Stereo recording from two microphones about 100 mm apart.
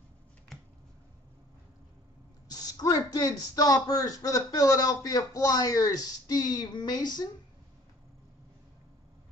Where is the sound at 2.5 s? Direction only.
40° left (ahead or behind).